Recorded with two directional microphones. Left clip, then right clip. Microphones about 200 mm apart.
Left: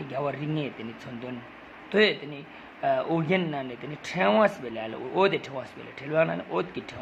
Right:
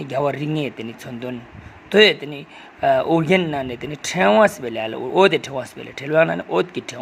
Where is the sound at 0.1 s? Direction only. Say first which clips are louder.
Right 9 dB; 30° right (ahead or behind).